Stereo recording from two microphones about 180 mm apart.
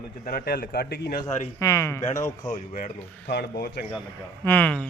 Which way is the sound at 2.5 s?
50° left (ahead or behind).